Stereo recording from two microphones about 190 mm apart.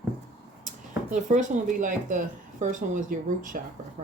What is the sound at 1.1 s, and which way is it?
Speech, 40° right (ahead or behind).